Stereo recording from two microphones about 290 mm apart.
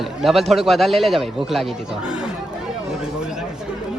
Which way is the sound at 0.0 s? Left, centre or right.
Centre.